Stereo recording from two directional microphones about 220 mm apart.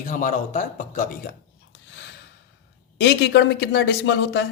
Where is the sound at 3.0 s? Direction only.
55° left (ahead or behind).